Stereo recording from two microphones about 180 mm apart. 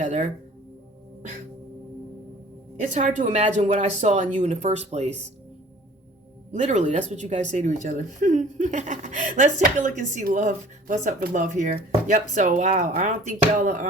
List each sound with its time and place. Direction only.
0.0 s speech: 45° right (ahead or behind)
2.9 s speech: 45° right (ahead or behind)
6.5 s a woman's voice: 40° right (ahead or behind)